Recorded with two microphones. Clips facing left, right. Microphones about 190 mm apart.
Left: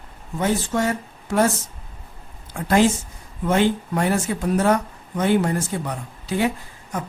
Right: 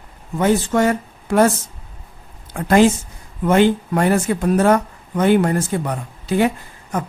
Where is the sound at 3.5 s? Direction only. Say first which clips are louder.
Right 5 dB; 60° right (ahead or behind).